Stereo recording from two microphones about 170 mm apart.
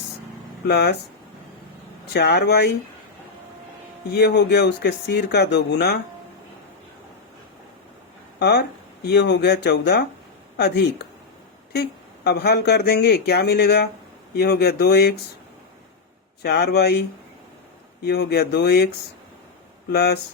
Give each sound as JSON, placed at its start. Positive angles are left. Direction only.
{"t": 0.7, "sound": "speech", "side_deg": 75}
{"t": 2.1, "sound": "speech", "side_deg": 75}
{"t": 4.1, "sound": "speech", "side_deg": 75}
{"t": 8.4, "sound": "speech", "side_deg": 75}
{"t": 16.4, "sound": "speech", "side_deg": 70}